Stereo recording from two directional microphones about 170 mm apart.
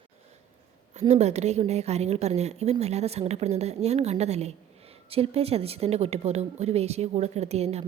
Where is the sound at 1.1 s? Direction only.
40° right (ahead or behind).